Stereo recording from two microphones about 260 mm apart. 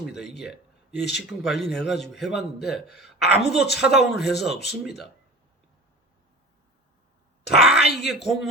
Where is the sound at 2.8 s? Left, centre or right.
Left.